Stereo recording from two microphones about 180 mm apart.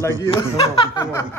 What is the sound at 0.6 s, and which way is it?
Chuckle, 30° left (ahead or behind).